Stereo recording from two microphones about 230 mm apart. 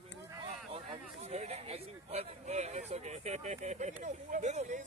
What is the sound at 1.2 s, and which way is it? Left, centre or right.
Speech, right.